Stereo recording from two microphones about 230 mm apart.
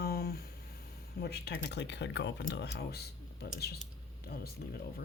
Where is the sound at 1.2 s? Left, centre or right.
Left.